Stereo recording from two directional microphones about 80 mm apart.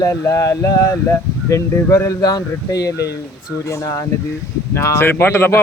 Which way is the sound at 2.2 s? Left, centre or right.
Left.